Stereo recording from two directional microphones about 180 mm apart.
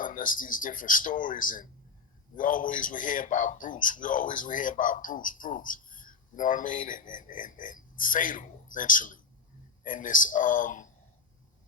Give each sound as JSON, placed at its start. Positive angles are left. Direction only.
{"t": 0.0, "sound": "a man's voice", "side_deg": 50}